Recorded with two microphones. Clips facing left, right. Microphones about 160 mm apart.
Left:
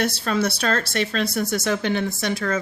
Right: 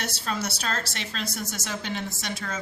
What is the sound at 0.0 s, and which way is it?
Speech, 60° left (ahead or behind).